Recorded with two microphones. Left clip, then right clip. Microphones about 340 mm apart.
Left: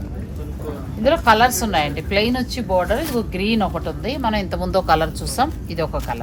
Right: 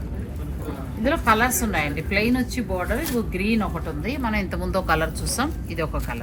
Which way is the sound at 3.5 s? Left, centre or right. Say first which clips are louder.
Left 5 dB; left.